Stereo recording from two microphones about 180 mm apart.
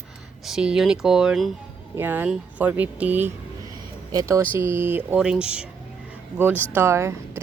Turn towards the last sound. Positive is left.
turn(degrees=-15)  # may be behind; listen again after turning